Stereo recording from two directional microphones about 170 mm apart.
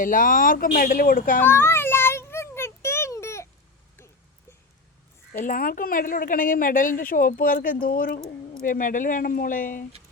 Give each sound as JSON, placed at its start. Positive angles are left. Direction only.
{"t": 0.0, "sound": "a woman's voice", "side_deg": 55}
{"t": 1.4, "sound": "a sound", "side_deg": 15}
{"t": 5.3, "sound": "a woman's voice", "side_deg": 55}